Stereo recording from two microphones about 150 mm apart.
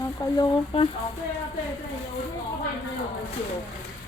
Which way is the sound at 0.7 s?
40° left (ahead or behind).